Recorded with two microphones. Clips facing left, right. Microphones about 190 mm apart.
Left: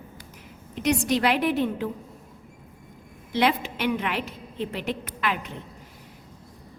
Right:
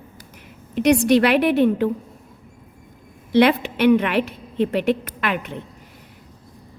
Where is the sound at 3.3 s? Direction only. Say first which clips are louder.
Right 8 dB; 65° right (ahead or behind).